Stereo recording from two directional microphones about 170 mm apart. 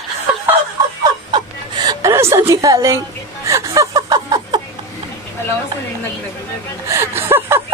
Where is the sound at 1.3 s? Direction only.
25° right (ahead or behind).